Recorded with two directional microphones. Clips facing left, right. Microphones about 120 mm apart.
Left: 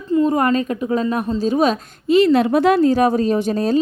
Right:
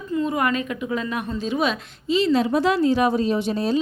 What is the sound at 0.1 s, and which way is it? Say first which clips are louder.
Speech: left 7 dB; 35° left (ahead or behind).